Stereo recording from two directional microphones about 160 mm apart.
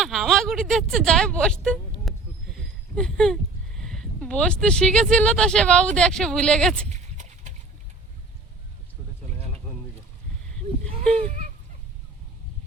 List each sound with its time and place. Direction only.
0.0 s a sound: centre (ahead or behind)
3.8 s speech: 5° left (ahead or behind)
6.9 s clip-clop: 50° right (ahead or behind)
11.2 s fowl: 45° right (ahead or behind)